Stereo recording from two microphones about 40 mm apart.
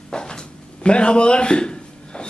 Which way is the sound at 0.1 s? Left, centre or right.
Left.